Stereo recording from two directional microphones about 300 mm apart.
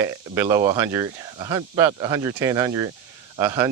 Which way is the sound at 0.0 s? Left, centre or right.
Centre.